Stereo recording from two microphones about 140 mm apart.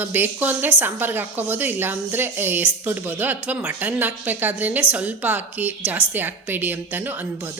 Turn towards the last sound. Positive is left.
turn(degrees=-15)  # may be behind; listen again after turning